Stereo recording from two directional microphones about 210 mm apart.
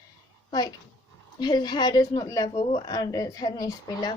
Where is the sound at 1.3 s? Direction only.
20° left (ahead or behind).